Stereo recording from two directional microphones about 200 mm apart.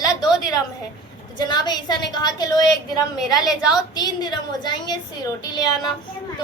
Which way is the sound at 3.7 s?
20° left (ahead or behind).